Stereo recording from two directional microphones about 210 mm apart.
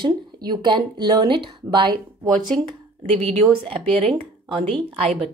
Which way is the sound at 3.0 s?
30° right (ahead or behind).